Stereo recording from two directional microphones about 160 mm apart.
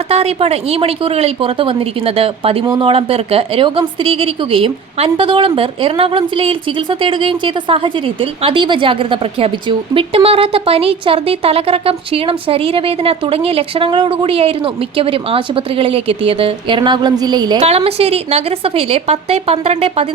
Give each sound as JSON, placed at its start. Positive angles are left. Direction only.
{"t": 0.1, "sound": "a woman's voice", "side_deg": -40}
{"t": 2.6, "sound": "speech", "side_deg": -25}
{"t": 2.9, "sound": "a woman's voice", "side_deg": -40}
{"t": 17.6, "sound": "a woman's voice", "side_deg": -40}